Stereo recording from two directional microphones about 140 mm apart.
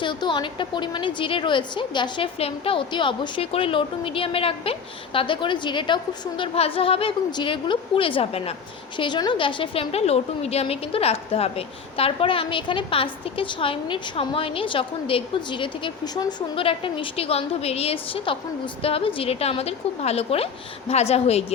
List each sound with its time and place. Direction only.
0.0 s a woman's voice: 35° left (ahead or behind)
9.0 s a woman's voice: 35° left (ahead or behind)